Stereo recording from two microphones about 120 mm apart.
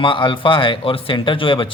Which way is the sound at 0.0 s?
45° left (ahead or behind).